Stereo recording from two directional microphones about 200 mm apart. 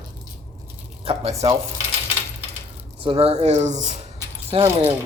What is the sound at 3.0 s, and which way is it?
Speech, 30° right (ahead or behind).